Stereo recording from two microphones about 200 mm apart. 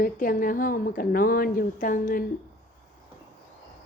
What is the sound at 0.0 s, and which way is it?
A woman's voice, 45° left (ahead or behind).